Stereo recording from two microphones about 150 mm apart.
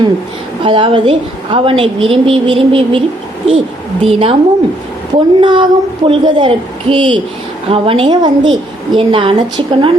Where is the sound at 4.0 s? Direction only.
40° right (ahead or behind).